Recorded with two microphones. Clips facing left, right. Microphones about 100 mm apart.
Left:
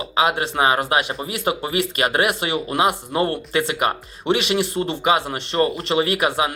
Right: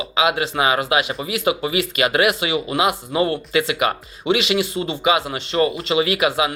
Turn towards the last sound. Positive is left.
turn(degrees=35)  # may be behind; listen again after turning